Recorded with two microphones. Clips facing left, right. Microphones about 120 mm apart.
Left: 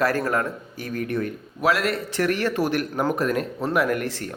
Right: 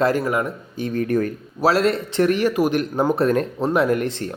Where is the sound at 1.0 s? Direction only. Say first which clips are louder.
Right 5 dB; 40° right (ahead or behind); by 4.3 s 25° right (ahead or behind).